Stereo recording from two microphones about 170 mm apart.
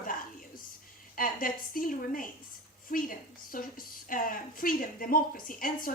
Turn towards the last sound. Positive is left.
turn(degrees=55)  # may be behind; listen again after turning